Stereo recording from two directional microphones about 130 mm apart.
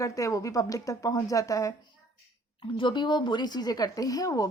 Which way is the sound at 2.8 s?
40° left (ahead or behind).